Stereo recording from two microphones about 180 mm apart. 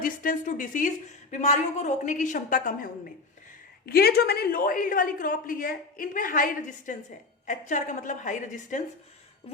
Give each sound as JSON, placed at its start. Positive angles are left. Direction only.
{"t": 0.0, "sound": "a woman's voice", "side_deg": 50}
{"t": 3.8, "sound": "a woman's voice", "side_deg": 60}